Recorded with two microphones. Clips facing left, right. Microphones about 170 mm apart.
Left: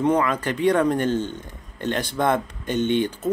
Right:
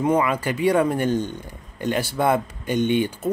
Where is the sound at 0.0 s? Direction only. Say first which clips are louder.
Even; 10° right (ahead or behind).